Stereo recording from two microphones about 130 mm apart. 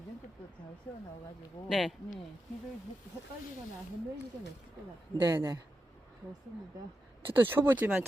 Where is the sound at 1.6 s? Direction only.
Centre (ahead or behind).